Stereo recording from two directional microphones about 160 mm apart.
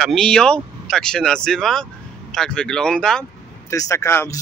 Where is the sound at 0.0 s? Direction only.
5° left (ahead or behind).